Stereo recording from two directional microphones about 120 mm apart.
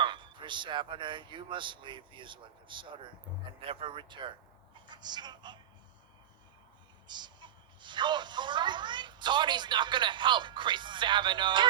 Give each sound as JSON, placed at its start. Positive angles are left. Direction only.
{"t": 0.0, "sound": "speech", "side_deg": -40}
{"t": 7.1, "sound": "speech", "side_deg": -40}